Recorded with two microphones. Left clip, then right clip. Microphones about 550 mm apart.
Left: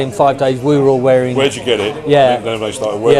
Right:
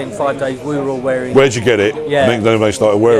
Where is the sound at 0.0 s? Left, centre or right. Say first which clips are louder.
Left 5 dB; left.